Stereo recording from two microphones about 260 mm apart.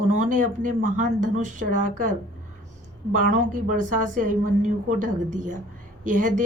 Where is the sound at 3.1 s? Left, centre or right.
Right.